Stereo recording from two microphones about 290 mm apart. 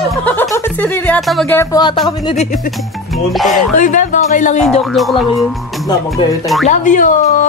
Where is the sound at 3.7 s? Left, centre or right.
Left.